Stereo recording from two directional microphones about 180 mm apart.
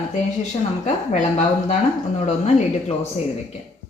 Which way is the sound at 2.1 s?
40° left (ahead or behind).